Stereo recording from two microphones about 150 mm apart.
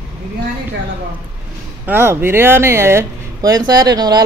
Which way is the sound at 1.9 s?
15° right (ahead or behind).